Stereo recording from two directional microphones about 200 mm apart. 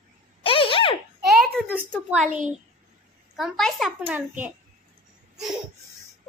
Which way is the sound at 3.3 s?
Centre (ahead or behind).